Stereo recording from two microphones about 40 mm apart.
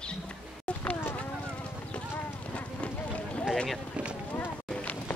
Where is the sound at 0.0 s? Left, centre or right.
Left.